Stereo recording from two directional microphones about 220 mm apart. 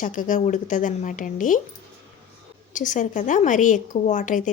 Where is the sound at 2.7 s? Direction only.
35° left (ahead or behind).